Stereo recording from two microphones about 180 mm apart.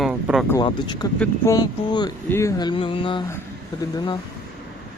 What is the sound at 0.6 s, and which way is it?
Speech, 25° left (ahead or behind).